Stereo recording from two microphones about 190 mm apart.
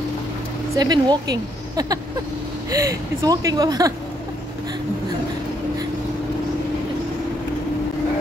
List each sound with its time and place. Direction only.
0.7 s a woman's voice: 20° right (ahead or behind)